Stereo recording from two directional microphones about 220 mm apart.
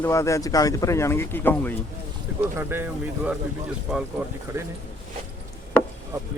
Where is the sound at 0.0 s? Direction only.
15° left (ahead or behind).